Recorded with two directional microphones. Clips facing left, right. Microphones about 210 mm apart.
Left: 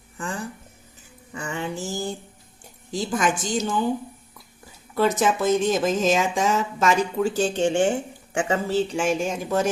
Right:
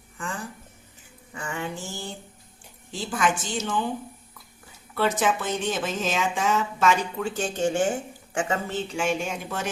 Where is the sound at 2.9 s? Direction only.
40° left (ahead or behind).